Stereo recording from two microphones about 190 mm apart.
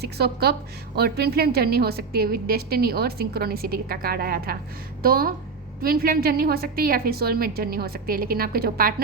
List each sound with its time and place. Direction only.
0.0 s a woman's voice: 55° right (ahead or behind)